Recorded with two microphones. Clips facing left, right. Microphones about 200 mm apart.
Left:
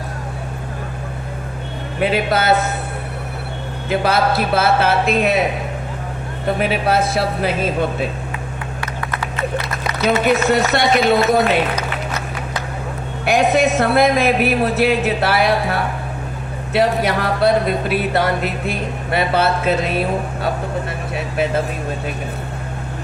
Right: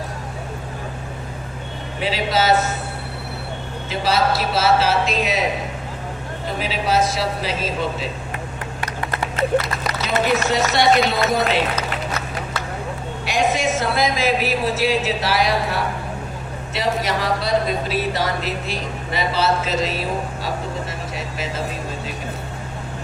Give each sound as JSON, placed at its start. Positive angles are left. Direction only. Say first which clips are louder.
{"t": 2.0, "sound": "speech", "louder": "left 3 dB", "side_deg": 55}
{"t": 3.8, "sound": "speech", "louder": "left 3 dB", "side_deg": 55}
{"t": 6.6, "sound": "speech", "louder": "left 1 dB", "side_deg": 60}
{"t": 9.0, "sound": "a sound", "louder": "right 1 dB", "side_deg": -25}
{"t": 10.5, "sound": "speech", "louder": "left 1 dB", "side_deg": 55}
{"t": 13.2, "sound": "speech", "louder": "left 6 dB", "side_deg": 60}